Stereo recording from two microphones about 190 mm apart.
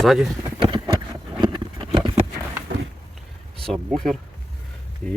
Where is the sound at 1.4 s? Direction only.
25° right (ahead or behind).